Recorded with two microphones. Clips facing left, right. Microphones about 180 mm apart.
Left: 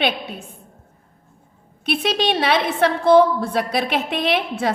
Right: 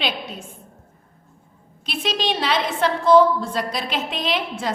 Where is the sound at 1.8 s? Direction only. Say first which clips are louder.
Left 4 dB; 60° left (ahead or behind).